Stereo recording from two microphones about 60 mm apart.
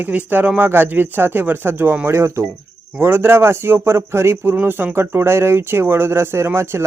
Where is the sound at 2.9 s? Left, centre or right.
Right.